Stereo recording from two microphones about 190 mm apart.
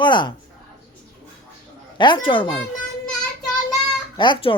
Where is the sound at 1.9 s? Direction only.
25° left (ahead or behind).